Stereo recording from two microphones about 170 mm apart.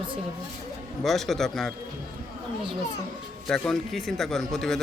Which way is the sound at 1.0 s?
Centre (ahead or behind).